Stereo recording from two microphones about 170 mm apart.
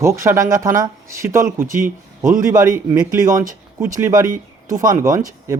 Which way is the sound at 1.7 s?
55° right (ahead or behind).